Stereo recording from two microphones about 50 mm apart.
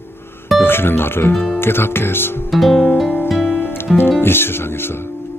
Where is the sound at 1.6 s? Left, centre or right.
Left.